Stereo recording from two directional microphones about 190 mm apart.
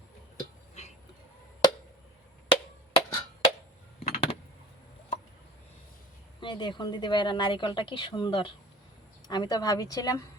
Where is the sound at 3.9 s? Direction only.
35° left (ahead or behind).